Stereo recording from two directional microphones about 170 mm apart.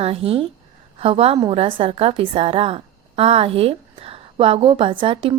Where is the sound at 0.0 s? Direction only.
35° right (ahead or behind).